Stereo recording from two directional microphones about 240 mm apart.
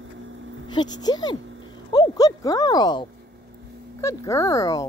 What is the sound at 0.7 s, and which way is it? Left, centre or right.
Speech, centre.